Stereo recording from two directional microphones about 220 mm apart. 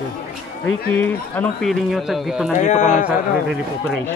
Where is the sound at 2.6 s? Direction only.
35° left (ahead or behind).